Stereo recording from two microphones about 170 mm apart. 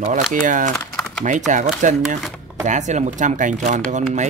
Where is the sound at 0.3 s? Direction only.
50° right (ahead or behind).